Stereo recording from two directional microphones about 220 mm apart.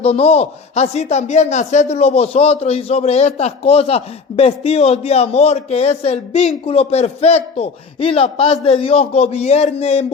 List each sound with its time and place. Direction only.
0.0 s a man's voice: 30° left (ahead or behind)